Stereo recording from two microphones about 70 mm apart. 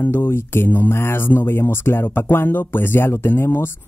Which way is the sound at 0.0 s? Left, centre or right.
Left.